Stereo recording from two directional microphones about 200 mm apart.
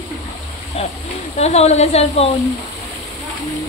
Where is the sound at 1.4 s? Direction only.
35° left (ahead or behind).